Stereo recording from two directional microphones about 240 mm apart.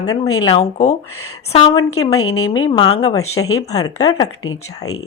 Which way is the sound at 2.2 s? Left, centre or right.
Left.